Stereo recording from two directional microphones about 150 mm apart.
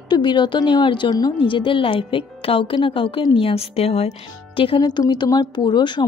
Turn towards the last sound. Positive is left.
turn(degrees=30)  # may be behind; listen again after turning